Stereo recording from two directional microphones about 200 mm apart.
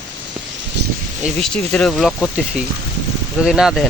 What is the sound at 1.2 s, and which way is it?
Speech, 5° left (ahead or behind).